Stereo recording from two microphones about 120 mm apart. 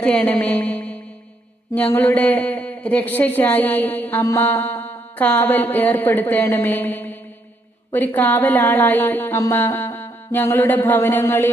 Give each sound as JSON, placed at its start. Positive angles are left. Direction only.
{"t": 0.0, "sound": "a man's voice", "side_deg": 10}